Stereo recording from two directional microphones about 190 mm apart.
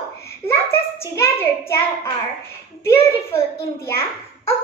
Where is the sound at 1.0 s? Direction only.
15° left (ahead or behind).